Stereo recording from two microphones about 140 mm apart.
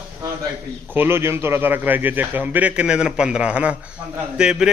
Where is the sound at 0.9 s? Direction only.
15° right (ahead or behind).